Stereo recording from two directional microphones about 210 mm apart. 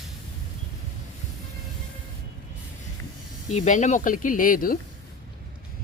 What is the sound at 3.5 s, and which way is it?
Speech, 35° left (ahead or behind).